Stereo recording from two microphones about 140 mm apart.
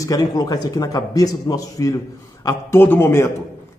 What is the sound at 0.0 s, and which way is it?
A man's voice, 25° left (ahead or behind).